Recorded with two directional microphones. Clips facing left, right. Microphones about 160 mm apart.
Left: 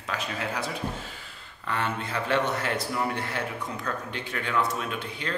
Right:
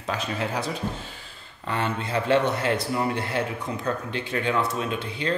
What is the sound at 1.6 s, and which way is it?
A man's voice, 25° right (ahead or behind).